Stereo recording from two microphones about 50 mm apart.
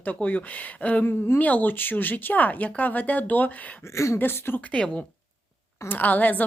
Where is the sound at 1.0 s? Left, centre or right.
Left.